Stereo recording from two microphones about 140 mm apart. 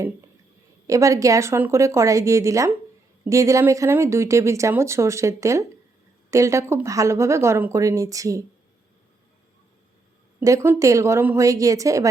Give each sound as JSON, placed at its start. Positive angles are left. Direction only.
{"t": 0.9, "sound": "speech", "side_deg": -25}
{"t": 10.4, "sound": "speech", "side_deg": -20}